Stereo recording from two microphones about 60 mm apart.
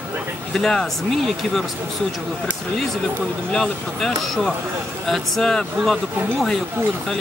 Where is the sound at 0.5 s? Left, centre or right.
Centre.